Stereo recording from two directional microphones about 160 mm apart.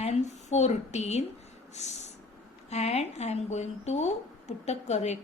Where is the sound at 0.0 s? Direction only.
45° left (ahead or behind).